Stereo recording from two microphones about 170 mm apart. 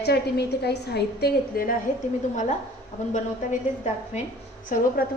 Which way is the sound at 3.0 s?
45° left (ahead or behind).